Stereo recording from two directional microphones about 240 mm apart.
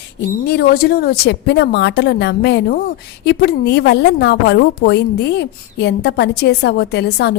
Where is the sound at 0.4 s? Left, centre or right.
Left.